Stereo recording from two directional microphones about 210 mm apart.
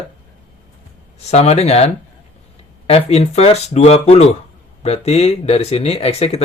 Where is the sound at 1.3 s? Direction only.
30° left (ahead or behind).